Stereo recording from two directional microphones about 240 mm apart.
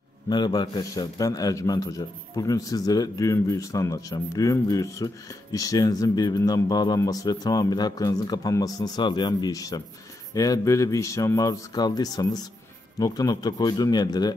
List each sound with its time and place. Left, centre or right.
0.3 s a man's voice: centre